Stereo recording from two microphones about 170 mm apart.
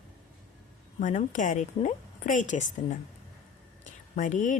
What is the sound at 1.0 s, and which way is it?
A woman's voice, 45° left (ahead or behind).